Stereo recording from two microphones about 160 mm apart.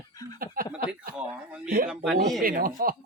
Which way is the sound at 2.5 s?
65° right (ahead or behind).